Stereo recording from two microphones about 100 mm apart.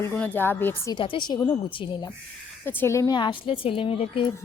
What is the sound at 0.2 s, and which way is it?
Speech, 20° left (ahead or behind).